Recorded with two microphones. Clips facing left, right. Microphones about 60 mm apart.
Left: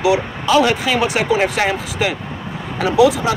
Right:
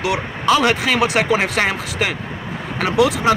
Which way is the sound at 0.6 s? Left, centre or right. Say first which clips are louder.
Left 1 dB; right.